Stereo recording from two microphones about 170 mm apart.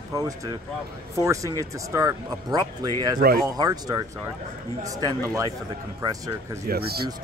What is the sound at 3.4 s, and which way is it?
Speech, 25° right (ahead or behind).